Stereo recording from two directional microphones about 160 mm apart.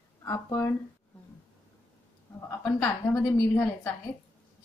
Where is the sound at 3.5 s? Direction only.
10° left (ahead or behind).